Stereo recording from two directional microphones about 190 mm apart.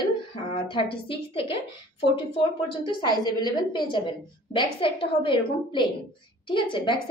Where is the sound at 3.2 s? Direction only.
25° left (ahead or behind).